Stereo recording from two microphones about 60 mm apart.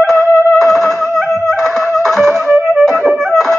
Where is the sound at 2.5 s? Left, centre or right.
Right.